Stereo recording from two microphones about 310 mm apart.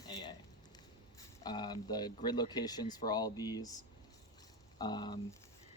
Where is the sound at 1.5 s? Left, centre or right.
Centre.